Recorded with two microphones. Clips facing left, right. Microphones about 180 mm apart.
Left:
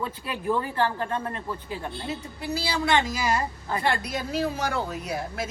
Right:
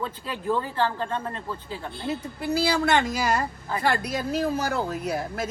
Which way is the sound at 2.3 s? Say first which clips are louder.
Right 6 dB; 50° right (ahead or behind).